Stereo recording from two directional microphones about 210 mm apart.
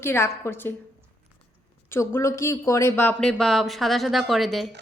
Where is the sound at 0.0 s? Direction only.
10° left (ahead or behind).